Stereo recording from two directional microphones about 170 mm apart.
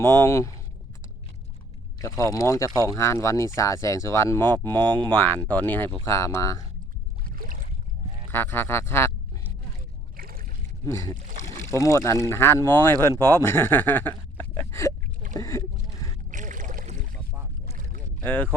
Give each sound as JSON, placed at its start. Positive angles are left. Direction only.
{"t": 0.0, "sound": "speech", "side_deg": 15}
{"t": 2.0, "sound": "speech", "side_deg": 20}
{"t": 2.6, "sound": "speech", "side_deg": -20}
{"t": 2.9, "sound": "speech", "side_deg": 15}
{"t": 7.3, "sound": "boat", "side_deg": -55}
{"t": 8.3, "sound": "speech", "side_deg": 15}
{"t": 10.2, "sound": "boat", "side_deg": -60}
{"t": 10.8, "sound": "speech", "side_deg": 15}
{"t": 15.0, "sound": "boat", "side_deg": -50}
{"t": 15.4, "sound": "speech", "side_deg": 20}
{"t": 16.3, "sound": "boat", "side_deg": -50}
{"t": 18.2, "sound": "speech", "side_deg": 10}